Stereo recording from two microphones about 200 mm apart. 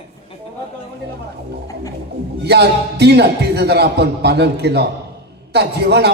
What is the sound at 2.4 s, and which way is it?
A man's voice, 55° right (ahead or behind).